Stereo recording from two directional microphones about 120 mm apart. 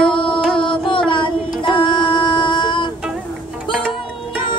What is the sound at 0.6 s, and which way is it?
Carnatic music, 45° left (ahead or behind).